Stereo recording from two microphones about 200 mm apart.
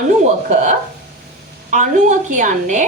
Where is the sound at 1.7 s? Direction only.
40° right (ahead or behind).